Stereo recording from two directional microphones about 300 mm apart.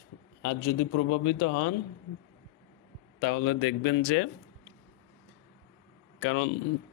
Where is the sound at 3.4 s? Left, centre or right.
Left.